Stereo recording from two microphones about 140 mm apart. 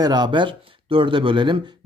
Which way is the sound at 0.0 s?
30° right (ahead or behind).